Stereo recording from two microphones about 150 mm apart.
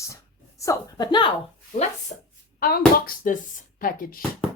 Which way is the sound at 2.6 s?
70° left (ahead or behind).